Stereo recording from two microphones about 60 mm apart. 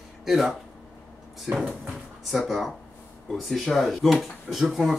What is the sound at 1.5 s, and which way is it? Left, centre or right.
Speech, centre.